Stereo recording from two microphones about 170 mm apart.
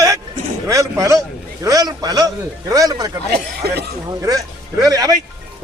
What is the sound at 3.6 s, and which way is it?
Speech, 70° right (ahead or behind).